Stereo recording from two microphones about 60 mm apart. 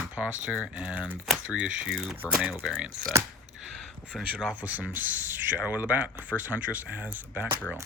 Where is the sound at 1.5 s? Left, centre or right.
Centre.